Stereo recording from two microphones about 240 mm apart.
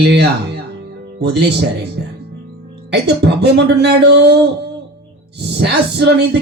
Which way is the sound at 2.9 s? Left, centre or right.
Right.